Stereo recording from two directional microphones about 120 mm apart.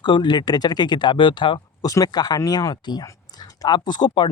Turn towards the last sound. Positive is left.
turn(degrees=40)  # may be behind; listen again after turning